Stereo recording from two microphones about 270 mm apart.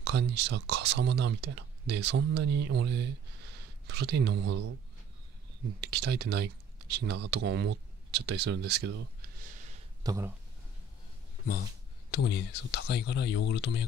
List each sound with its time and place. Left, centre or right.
0.0 s speech: right
5.8 s speech: right
9.4 s a sound: right
10.0 s speech: centre
12.1 s speech: left